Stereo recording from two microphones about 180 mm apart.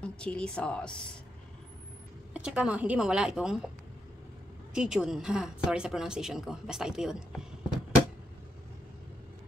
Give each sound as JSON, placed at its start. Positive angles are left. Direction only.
{"t": 0.0, "sound": "speech", "side_deg": 5}
{"t": 2.3, "sound": "speech", "side_deg": -5}
{"t": 4.7, "sound": "speech", "side_deg": -5}